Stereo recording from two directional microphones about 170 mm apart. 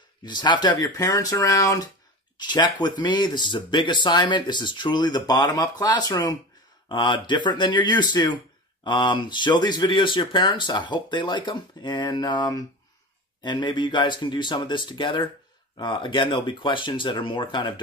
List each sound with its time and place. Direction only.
0.2 s speech: 25° left (ahead or behind)